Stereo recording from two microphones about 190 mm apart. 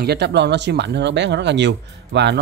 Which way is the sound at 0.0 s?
60° right (ahead or behind).